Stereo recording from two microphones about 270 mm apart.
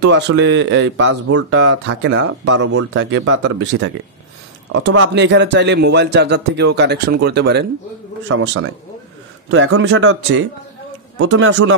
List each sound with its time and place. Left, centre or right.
0.0 s speech: right
4.9 s speech: right